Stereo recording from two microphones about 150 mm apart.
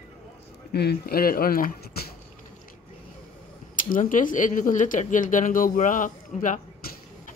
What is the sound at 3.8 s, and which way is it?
Speech, 65° left (ahead or behind).